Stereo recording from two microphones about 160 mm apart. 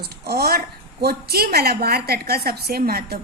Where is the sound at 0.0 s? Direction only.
80° right.